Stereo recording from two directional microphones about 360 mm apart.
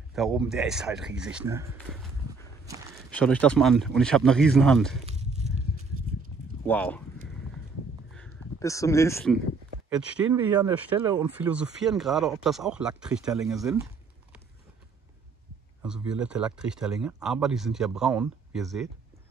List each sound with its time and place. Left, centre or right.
0.1 s speech: centre
3.1 s speech: centre
5.0 s a sound: centre
6.6 s speech: centre
8.1 s a sound: centre
9.8 s speech: centre
15.8 s speech: centre